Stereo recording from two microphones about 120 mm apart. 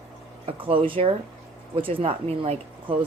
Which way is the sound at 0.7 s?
45° right (ahead or behind).